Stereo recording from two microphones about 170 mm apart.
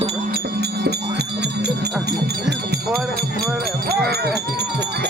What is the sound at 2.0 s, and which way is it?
Speech, 75° right (ahead or behind).